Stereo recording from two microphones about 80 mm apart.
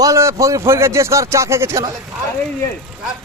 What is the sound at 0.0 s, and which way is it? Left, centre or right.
Speech, right.